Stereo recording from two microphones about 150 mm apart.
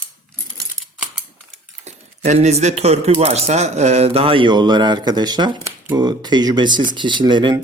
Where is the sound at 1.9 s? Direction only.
50° right (ahead or behind).